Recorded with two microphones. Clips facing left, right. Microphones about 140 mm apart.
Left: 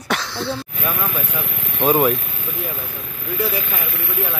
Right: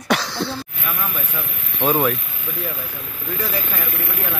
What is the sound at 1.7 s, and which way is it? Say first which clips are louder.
Speech: left 2 dB; 10° left (ahead or behind).